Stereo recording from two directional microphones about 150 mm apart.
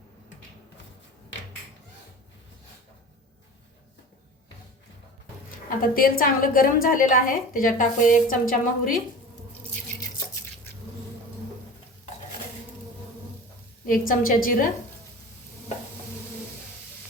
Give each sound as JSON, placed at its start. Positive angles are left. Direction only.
{"t": 5.6, "sound": "a woman's voice", "side_deg": 70}
{"t": 13.8, "sound": "a woman's voice", "side_deg": 70}